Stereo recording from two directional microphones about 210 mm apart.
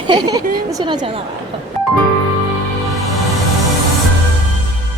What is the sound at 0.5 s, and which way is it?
Speech, 20° right (ahead or behind).